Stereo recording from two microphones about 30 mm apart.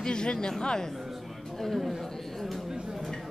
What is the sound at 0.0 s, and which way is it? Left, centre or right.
Speech, left.